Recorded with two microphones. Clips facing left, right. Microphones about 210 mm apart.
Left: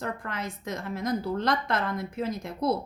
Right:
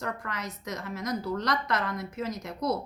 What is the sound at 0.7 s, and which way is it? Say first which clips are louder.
A woman's voice: left 3 dB; 30° left (ahead or behind).